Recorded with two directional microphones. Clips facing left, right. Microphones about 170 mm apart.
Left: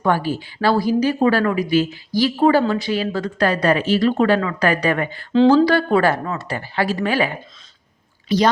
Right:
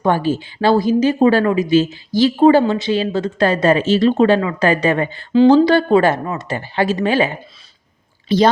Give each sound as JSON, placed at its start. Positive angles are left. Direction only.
{"t": 0.0, "sound": "a woman's voice", "side_deg": -25}